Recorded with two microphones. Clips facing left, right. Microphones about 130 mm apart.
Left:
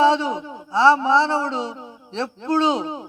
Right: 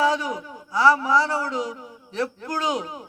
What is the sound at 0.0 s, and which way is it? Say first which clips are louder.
A man's voice: left 5 dB; 25° left (ahead or behind).